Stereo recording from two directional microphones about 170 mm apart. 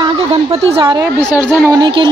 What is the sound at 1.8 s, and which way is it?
Speech, 25° right (ahead or behind).